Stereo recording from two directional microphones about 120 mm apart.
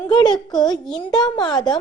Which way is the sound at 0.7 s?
5° left (ahead or behind).